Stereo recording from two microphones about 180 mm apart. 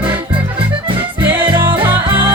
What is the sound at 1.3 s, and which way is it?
Music, 10° right (ahead or behind).